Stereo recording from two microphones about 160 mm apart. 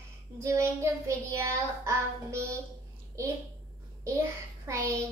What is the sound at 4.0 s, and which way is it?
Speech, 20° right (ahead or behind).